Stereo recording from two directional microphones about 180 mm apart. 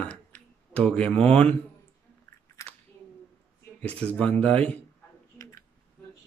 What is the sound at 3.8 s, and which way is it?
Speech, 10° left (ahead or behind).